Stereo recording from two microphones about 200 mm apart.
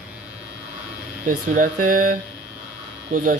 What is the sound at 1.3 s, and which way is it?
Speech, 45° right (ahead or behind).